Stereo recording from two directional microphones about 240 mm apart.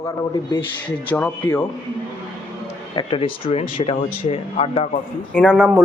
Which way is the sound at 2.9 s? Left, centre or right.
Left.